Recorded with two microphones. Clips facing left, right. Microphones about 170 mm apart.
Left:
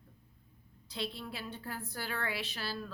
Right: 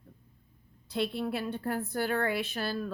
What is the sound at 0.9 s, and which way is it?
A woman's voice, 60° right (ahead or behind).